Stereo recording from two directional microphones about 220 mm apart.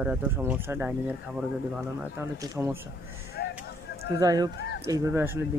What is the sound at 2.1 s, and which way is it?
Speech, 10° right (ahead or behind).